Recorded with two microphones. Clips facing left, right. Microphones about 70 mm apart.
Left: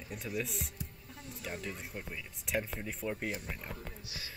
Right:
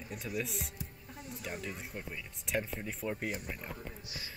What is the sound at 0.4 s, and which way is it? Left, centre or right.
Speech, centre.